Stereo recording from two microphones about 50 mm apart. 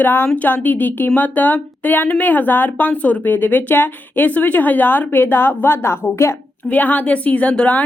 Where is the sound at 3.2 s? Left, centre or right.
Left.